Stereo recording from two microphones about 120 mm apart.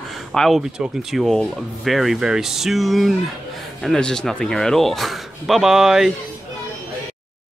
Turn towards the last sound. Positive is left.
turn(degrees=-5)  # may be behind; listen again after turning